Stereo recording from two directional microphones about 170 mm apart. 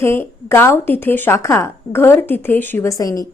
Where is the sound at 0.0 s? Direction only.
15° left (ahead or behind).